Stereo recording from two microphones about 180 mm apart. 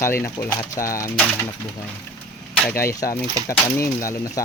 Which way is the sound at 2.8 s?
15° left (ahead or behind).